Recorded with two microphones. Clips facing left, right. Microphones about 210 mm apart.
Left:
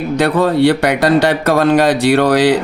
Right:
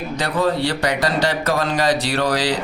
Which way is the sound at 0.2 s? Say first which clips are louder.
Left 8 dB; 60° left (ahead or behind).